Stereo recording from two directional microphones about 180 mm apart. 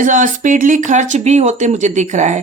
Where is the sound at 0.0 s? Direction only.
45° right (ahead or behind).